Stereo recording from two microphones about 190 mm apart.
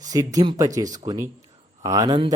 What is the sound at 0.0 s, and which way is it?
A man's voice, 20° right (ahead or behind).